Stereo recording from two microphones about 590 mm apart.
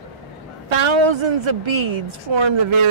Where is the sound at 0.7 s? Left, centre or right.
Right.